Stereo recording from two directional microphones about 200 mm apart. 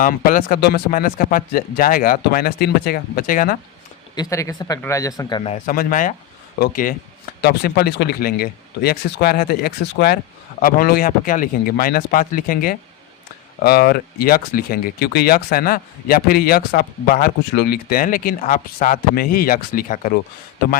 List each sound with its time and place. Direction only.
0.0 s speech: 45° left (ahead or behind)
4.1 s speech: 15° left (ahead or behind)
5.5 s speech: 45° left (ahead or behind)